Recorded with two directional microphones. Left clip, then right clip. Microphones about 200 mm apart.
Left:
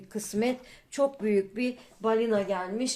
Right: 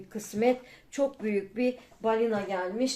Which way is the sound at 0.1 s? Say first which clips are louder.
Right 3 dB; 50° left (ahead or behind).